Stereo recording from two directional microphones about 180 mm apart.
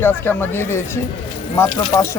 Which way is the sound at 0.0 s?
10° left (ahead or behind).